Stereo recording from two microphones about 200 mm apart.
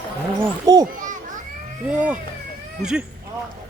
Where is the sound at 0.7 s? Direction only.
20° right (ahead or behind).